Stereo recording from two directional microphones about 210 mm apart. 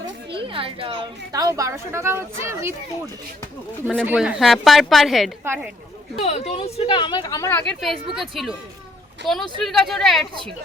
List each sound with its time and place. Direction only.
0.0 s a woman's voice: 25° right (ahead or behind)
4.0 s a woman's voice: 5° right (ahead or behind)
6.2 s speech: 30° left (ahead or behind); by 7.6 s 15° left (ahead or behind)
7.7 s a woman's voice: centre (ahead or behind)